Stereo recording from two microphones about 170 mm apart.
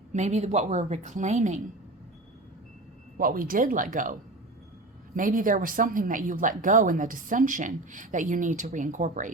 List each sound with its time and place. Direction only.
0.1 s speech: 40° right (ahead or behind)
3.2 s speech: 55° right (ahead or behind)
5.1 s speech: 50° right (ahead or behind)